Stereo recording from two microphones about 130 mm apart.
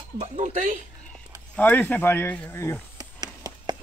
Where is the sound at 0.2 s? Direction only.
70° right (ahead or behind).